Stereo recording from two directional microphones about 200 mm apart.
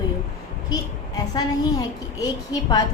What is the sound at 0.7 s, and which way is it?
Speech, 20° left (ahead or behind).